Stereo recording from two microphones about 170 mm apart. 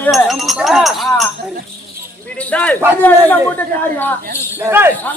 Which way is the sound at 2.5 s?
10° left (ahead or behind).